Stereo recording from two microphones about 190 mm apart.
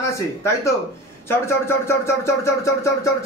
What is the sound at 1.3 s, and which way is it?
Speech, 10° left (ahead or behind).